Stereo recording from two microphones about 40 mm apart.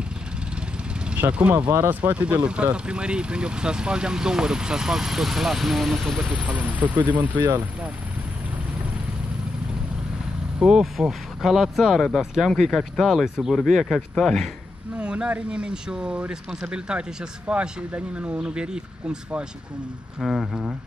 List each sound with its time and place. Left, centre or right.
1.9 s speech: right
2.2 s speech: right; by 6.3 s centre
6.3 s speech: right
10.8 s speech: centre
15.0 s speech: right
20.2 s speech: centre